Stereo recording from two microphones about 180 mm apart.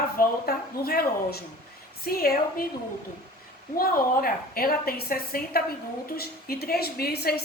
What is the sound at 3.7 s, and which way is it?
Speech, 55° left (ahead or behind).